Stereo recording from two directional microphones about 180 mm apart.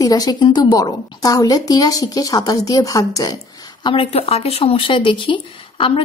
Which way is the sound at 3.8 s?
30° left (ahead or behind).